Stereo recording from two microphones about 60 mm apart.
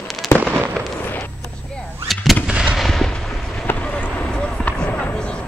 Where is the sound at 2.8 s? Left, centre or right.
Centre.